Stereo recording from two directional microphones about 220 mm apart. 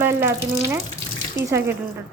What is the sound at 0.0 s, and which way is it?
A woman's voice, 10° right (ahead or behind).